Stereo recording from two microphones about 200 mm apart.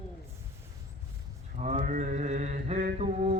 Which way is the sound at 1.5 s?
35° right (ahead or behind).